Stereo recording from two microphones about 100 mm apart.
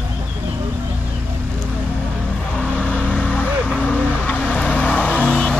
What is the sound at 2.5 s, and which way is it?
Vehicle, 10° left (ahead or behind).